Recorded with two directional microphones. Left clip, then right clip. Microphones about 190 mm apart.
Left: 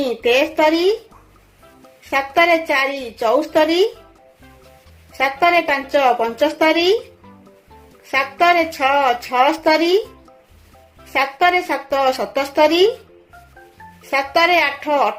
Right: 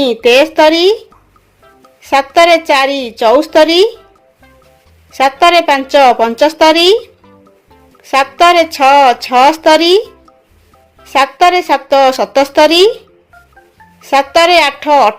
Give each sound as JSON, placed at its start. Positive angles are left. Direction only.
{"t": 0.0, "sound": "a woman's voice", "side_deg": -55}
{"t": 2.0, "sound": "a woman's voice", "side_deg": -55}
{"t": 5.1, "sound": "a woman's voice", "side_deg": -55}
{"t": 8.1, "sound": "a woman's voice", "side_deg": -55}
{"t": 11.1, "sound": "a woman's voice", "side_deg": -55}
{"t": 14.1, "sound": "a woman's voice", "side_deg": -55}